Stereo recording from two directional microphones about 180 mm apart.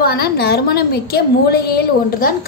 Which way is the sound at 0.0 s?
60° left (ahead or behind).